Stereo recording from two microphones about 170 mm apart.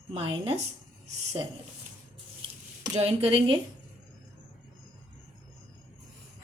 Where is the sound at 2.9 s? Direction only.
35° right (ahead or behind).